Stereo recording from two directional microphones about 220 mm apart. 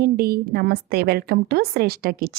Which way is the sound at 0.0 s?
45° right (ahead or behind).